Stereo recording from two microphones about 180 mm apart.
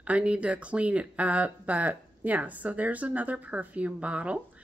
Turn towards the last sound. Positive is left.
turn(degrees=-5)  # may be behind; listen again after turning